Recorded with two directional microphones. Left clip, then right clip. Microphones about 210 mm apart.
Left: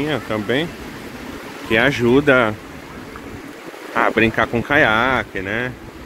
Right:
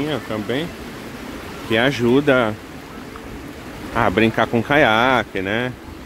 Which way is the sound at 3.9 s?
10° right (ahead or behind).